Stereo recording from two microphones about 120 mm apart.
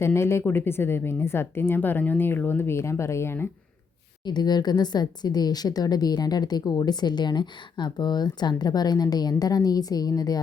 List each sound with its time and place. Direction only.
0.0 s a woman's voice: 20° left (ahead or behind)
4.3 s a woman's voice: 35° left (ahead or behind)